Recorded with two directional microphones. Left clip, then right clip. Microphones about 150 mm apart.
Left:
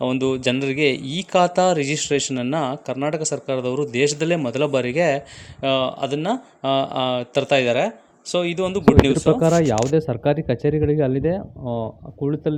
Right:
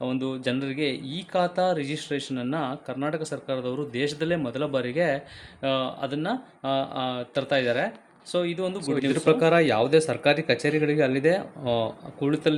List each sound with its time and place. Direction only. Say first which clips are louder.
0.0 s speech: left 8 dB; 40° left (ahead or behind)
11.6 s speech: right 2 dB; 10° right (ahead or behind)
12.2 s speech: left 1 dB; 30° left (ahead or behind)